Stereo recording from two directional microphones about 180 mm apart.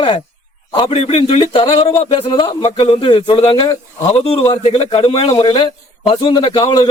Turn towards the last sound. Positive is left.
turn(degrees=30)  # may be behind; listen again after turning